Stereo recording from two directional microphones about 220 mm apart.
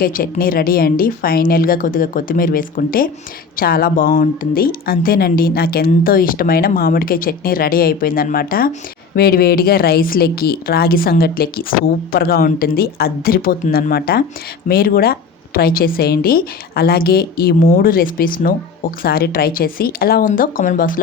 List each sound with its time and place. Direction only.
0.0 s a woman's voice: 40° left (ahead or behind)